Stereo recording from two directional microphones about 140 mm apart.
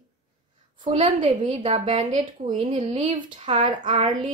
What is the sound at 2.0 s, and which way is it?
Speech, 60° right (ahead or behind).